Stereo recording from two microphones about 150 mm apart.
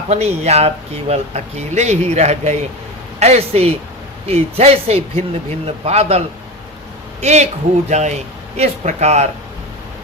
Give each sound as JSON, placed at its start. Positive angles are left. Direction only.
{"t": 0.1, "sound": "speech", "side_deg": -45}